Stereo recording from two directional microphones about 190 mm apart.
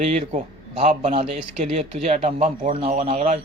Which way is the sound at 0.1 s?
35° right (ahead or behind).